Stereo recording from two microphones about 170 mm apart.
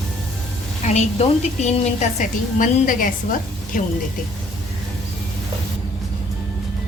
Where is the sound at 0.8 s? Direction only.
40° left (ahead or behind).